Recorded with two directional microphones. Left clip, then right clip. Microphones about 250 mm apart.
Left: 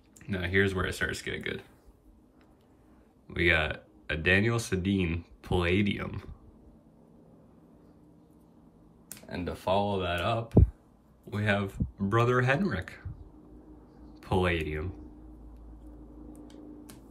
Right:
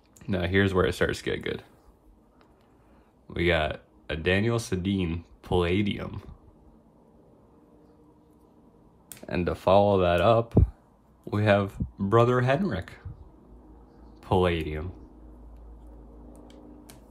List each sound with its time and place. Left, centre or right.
0.2 s speech: centre
3.3 s speech: centre
9.4 s speech: centre
14.2 s speech: centre
16.3 s a sound: centre